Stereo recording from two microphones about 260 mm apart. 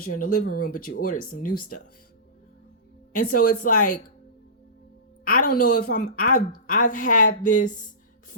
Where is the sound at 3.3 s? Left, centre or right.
Left.